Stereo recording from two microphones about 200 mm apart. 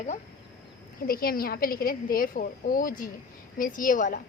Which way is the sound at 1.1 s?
45° left (ahead or behind).